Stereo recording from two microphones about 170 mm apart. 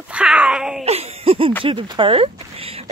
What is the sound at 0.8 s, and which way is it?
Speech, 35° right (ahead or behind).